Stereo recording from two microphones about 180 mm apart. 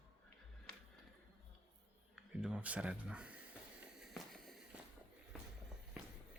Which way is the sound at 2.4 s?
5° right (ahead or behind).